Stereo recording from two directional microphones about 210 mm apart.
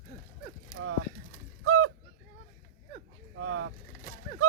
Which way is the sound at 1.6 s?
75° right (ahead or behind).